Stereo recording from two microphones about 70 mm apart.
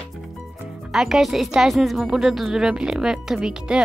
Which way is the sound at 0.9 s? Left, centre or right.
Centre.